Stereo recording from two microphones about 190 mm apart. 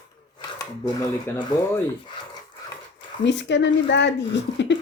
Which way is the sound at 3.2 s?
70° left (ahead or behind).